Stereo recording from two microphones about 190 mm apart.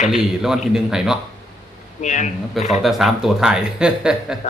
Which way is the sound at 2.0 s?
40° left (ahead or behind).